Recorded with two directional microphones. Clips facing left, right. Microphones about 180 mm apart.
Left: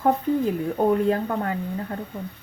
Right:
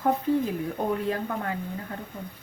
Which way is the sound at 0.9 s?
45° left (ahead or behind).